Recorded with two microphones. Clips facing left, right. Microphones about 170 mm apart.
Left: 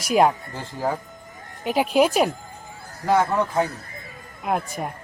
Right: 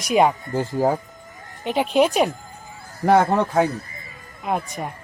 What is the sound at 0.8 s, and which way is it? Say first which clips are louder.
Speech: right 5 dB; 20° right (ahead or behind).